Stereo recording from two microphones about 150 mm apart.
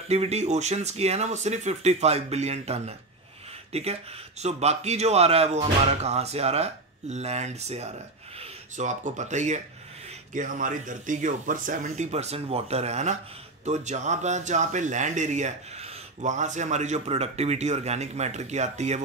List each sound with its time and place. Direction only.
0.1 s speech: 45° right (ahead or behind)